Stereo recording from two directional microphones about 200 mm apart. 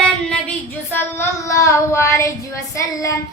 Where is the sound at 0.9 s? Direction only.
10° left (ahead or behind).